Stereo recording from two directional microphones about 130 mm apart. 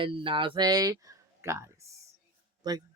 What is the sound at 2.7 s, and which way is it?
Speech, 30° right (ahead or behind).